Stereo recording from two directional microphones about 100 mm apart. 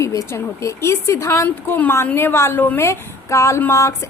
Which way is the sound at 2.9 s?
30° left (ahead or behind).